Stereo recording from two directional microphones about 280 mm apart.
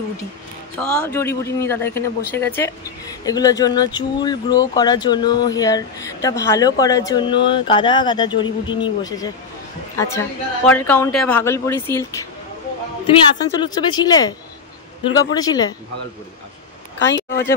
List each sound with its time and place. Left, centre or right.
0.7 s a man's voice: centre
15.3 s a man's voice: centre
17.1 s speech: left